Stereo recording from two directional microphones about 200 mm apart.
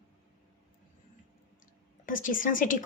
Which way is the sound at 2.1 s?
40° left (ahead or behind).